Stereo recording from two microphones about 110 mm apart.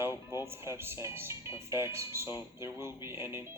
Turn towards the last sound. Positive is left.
turn(degrees=-20)  # may be behind; listen again after turning